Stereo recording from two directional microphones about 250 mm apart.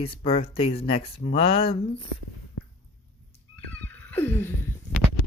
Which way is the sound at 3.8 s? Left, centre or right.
Centre.